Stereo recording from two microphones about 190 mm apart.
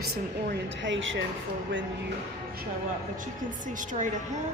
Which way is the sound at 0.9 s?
85° right.